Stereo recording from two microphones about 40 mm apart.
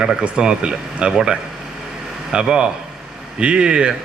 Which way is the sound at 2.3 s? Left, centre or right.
Right.